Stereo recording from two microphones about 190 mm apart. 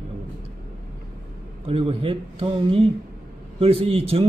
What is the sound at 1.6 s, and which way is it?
A man's voice, 30° right (ahead or behind).